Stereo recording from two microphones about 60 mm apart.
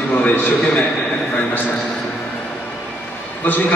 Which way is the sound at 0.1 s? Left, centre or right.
Left.